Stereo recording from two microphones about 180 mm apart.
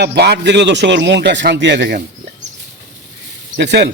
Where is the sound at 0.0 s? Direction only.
65° right (ahead or behind).